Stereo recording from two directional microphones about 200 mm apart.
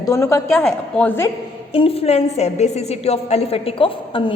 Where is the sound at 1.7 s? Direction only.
30° left (ahead or behind).